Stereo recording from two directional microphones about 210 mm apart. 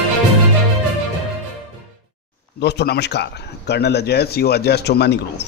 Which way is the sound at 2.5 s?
50° left (ahead or behind).